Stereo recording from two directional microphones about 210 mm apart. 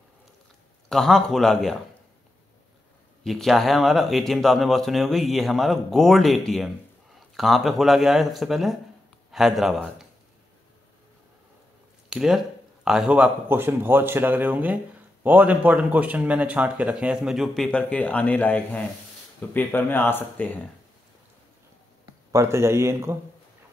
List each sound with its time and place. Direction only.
0.8 s speech: centre (ahead or behind)
3.3 s speech: centre (ahead or behind)
12.1 s speech: 5° right (ahead or behind)
22.3 s speech: 10° right (ahead or behind)